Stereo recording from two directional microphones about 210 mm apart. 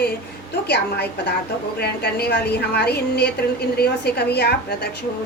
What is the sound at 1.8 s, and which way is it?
A woman's voice, 50° left (ahead or behind).